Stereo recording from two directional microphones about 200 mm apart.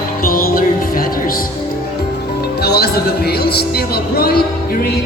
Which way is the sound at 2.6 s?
55° left (ahead or behind).